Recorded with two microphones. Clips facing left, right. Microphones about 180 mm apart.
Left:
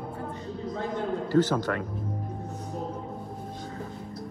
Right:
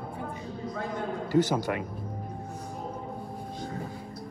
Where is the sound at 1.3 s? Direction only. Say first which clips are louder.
Left 1 dB; 15° right (ahead or behind).